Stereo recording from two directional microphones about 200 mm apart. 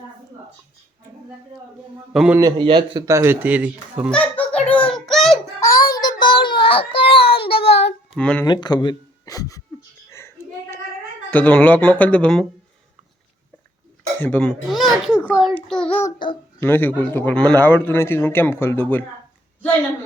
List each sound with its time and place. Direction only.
2.1 s a man's voice: 5° right (ahead or behind)
2.4 s speech: 25° right (ahead or behind); by 4.1 s 5° right (ahead or behind)
4.1 s music: 5° left (ahead or behind)
5.5 s child singing: 15° left (ahead or behind)
8.1 s a man's voice: 5° left (ahead or behind)
8.4 s speech: 20° left (ahead or behind)
10.1 s a sound: 10° left (ahead or behind)
11.3 s a man's voice: 5° left (ahead or behind)
14.2 s a child's voice: 5° left (ahead or behind)
16.1 s a child's voice: 25° left (ahead or behind)
16.6 s a man's voice: 10° left (ahead or behind)